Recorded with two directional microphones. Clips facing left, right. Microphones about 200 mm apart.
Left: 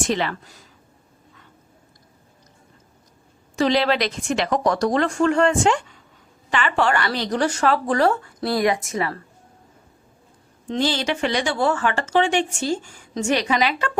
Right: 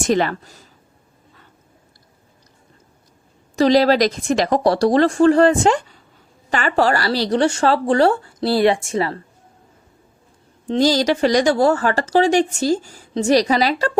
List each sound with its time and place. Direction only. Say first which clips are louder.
0.0 s speech: right 5 dB; 45° right (ahead or behind)
3.5 s speech: right 6 dB; 40° right (ahead or behind)
10.7 s speech: right 6 dB; 40° right (ahead or behind)